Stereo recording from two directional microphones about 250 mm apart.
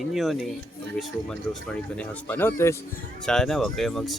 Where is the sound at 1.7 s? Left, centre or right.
Centre.